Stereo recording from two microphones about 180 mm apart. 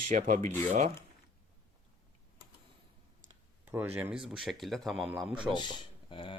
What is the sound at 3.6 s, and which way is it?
Speech, 10° right (ahead or behind).